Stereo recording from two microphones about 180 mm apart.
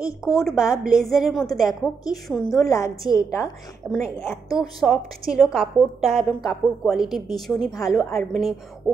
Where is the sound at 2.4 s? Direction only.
20° left (ahead or behind).